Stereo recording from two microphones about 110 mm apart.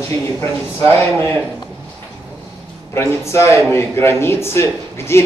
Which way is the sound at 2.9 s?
25° left (ahead or behind).